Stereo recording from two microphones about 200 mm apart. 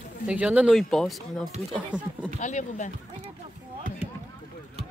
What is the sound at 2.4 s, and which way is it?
Speech, 35° left (ahead or behind).